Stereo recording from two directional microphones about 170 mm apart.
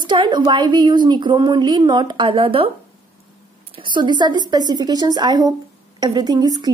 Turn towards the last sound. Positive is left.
turn(degrees=-25)  # may be behind; listen again after turning